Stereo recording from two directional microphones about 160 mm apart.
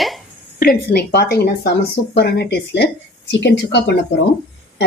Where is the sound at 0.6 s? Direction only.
75° left (ahead or behind).